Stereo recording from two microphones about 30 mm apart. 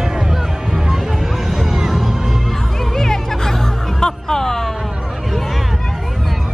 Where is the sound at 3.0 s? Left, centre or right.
Centre.